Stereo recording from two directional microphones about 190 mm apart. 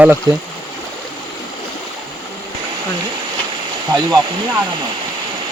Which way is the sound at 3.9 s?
20° right (ahead or behind).